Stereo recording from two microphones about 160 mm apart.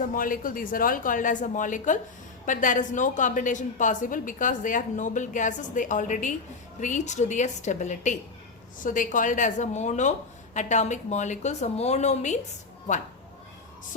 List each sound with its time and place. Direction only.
0.1 s a woman's voice: 60° left (ahead or behind)